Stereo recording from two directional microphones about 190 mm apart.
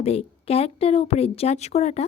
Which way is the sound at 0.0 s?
35° left (ahead or behind).